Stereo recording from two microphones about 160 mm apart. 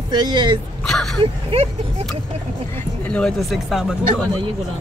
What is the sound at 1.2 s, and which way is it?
Speech, 35° right (ahead or behind).